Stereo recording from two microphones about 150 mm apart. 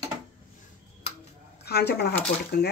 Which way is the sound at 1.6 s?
90° left.